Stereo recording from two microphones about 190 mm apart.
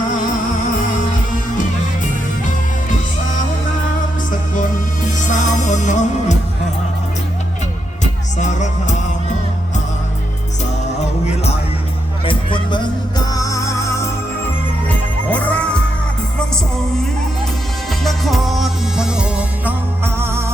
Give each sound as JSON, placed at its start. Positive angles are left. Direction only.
{"t": 4.3, "sound": "music", "side_deg": 45}
{"t": 8.4, "sound": "music", "side_deg": 40}
{"t": 12.2, "sound": "music", "side_deg": 25}
{"t": 18.0, "sound": "music", "side_deg": 0}